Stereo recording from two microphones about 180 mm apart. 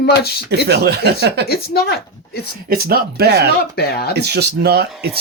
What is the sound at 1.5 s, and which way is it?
Speech, 60° left (ahead or behind).